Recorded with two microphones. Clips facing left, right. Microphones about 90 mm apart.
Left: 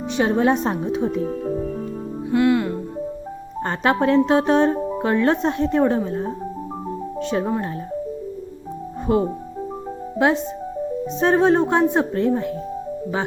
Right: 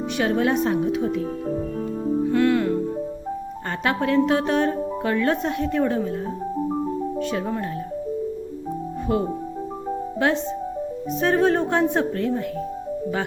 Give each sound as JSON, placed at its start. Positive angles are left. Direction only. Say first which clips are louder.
{"t": 0.2, "sound": "a woman's voice", "louder": "left 3 dB", "side_deg": 25}
{"t": 2.3, "sound": "music", "louder": "left 3 dB", "side_deg": 5}
{"t": 3.8, "sound": "a woman's voice", "louder": "left 3 dB", "side_deg": 30}
{"t": 7.2, "sound": "a woman's voice", "louder": "left 3 dB", "side_deg": 25}
{"t": 10.2, "sound": "a woman's voice", "louder": "left 4 dB", "side_deg": 20}